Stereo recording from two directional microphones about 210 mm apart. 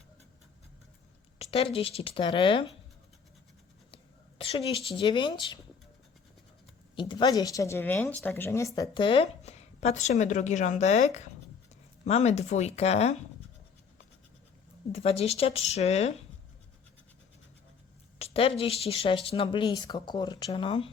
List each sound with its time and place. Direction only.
1.4 s speech: 30° left (ahead or behind)
3.9 s a sound: 25° left (ahead or behind)
4.9 s speech: 20° left (ahead or behind)
6.9 s speech: 20° left (ahead or behind)
14.9 s speech: 30° left (ahead or behind)
18.2 s speech: 25° left (ahead or behind)